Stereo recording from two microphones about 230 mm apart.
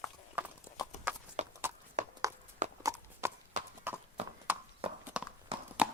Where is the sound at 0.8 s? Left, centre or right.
Centre.